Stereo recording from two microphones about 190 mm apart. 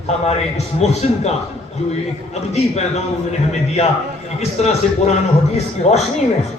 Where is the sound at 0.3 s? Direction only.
35° left (ahead or behind).